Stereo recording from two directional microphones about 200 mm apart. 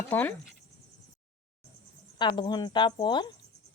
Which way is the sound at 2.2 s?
20° left (ahead or behind).